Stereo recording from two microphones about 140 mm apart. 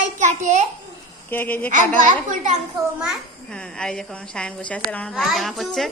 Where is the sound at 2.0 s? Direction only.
65° right (ahead or behind).